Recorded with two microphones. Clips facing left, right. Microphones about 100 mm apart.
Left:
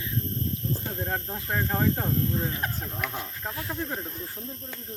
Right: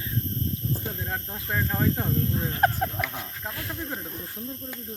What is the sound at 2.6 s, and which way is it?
Speech, 50° right (ahead or behind).